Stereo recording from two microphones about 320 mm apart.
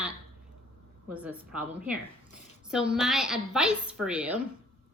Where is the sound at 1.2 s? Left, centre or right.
Centre.